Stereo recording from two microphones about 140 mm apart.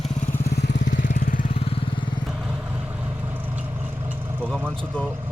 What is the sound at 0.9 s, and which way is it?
Vehicle, 70° left (ahead or behind).